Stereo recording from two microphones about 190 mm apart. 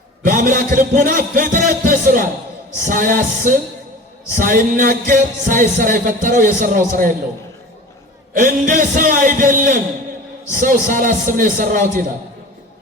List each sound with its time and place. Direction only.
0.3 s music: 40° right (ahead or behind)
4.4 s music: 45° right (ahead or behind)
8.3 s music: 40° right (ahead or behind)